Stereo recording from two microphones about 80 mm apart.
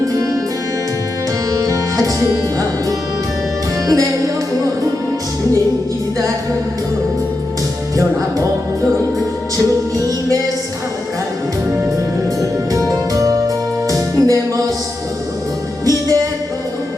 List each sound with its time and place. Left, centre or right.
1.5 s music: right
3.8 s music: right
12.4 s music: right
15.8 s music: right